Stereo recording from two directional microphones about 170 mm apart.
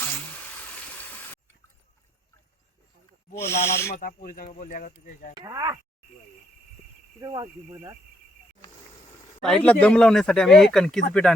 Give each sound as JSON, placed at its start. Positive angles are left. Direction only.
{"t": 0.2, "sound": "a sound", "side_deg": 5}
{"t": 3.3, "sound": "speech", "side_deg": 15}
{"t": 3.9, "sound": "speech", "side_deg": 60}
{"t": 5.3, "sound": "speech", "side_deg": -20}
{"t": 7.2, "sound": "speech", "side_deg": -25}
{"t": 9.4, "sound": "speech", "side_deg": 5}